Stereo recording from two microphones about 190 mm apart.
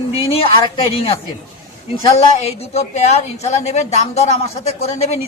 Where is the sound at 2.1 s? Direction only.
35° left (ahead or behind).